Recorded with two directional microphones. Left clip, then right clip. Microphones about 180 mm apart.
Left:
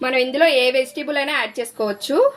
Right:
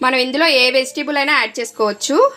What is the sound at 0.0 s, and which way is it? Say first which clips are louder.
A woman's voice: right 2 dB; 35° right (ahead or behind).